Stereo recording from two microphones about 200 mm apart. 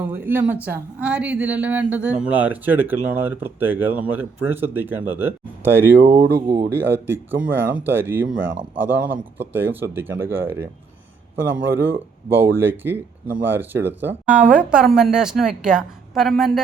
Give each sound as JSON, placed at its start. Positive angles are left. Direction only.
{"t": 0.0, "sound": "speech", "side_deg": -10}
{"t": 6.1, "sound": "speech", "side_deg": -50}
{"t": 6.7, "sound": "speech", "side_deg": -10}
{"t": 8.4, "sound": "speech", "side_deg": -70}
{"t": 8.8, "sound": "speech", "side_deg": -10}